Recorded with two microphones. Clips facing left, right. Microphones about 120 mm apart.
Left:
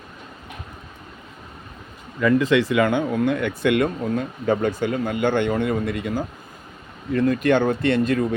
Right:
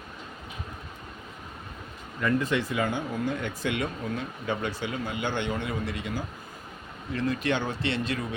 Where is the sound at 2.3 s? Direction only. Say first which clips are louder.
Left 9 dB; 90° left; by 3.9 s 60° left (ahead or behind).